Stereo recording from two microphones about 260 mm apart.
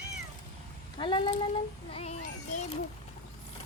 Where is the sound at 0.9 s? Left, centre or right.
Centre.